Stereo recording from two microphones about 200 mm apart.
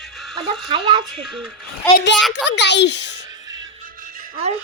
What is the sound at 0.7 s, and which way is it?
Speech, 25° right (ahead or behind).